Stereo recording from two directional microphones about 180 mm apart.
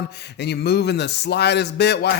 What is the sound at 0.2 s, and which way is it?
Speech, 65° left (ahead or behind).